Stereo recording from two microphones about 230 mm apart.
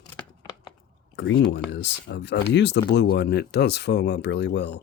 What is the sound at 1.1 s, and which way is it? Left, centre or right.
Speech, left.